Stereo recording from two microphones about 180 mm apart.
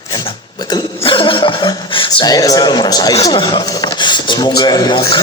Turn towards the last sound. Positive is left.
turn(degrees=20)  # may be behind; listen again after turning